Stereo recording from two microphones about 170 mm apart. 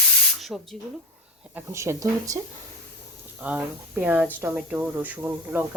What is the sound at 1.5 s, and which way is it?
Speech, 15° right (ahead or behind).